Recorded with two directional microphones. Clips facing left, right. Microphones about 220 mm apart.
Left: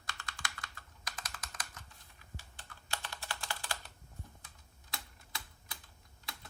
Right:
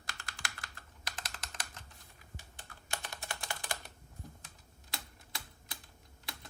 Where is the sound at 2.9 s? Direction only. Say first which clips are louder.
Right 1 dB; 20° right (ahead or behind).